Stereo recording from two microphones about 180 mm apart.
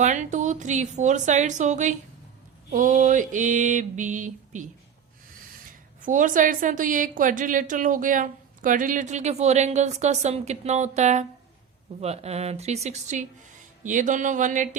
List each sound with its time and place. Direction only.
0.0 s a woman's voice: 40° right (ahead or behind)
6.0 s a woman's voice: 45° right (ahead or behind)